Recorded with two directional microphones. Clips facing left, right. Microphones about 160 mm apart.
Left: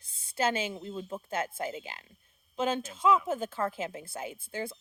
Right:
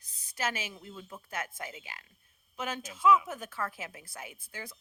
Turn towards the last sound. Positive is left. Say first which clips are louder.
# left 9 dB
turn(degrees=25)  # may be behind; listen again after turning